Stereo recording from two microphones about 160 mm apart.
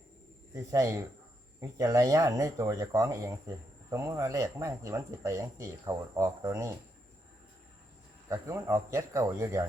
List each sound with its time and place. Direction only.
0.5 s speech: 20° right (ahead or behind)
8.3 s speech: 20° right (ahead or behind)